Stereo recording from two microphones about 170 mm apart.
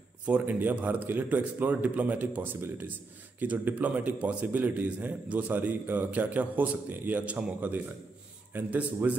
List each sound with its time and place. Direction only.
0.3 s a man's voice: 10° right (ahead or behind)